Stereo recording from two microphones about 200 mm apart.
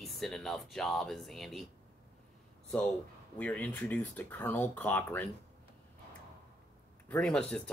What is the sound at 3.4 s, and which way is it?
Speech, 5° left (ahead or behind).